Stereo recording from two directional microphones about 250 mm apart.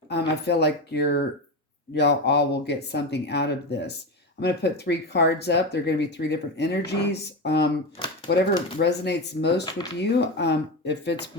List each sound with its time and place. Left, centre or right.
0.1 s speech: left